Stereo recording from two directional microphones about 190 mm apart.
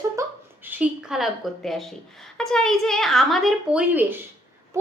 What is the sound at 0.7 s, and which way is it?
A woman's voice, 5° right (ahead or behind).